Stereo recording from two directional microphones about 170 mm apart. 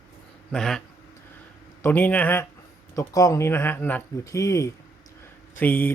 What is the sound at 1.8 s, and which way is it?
Speech, 10° left (ahead or behind).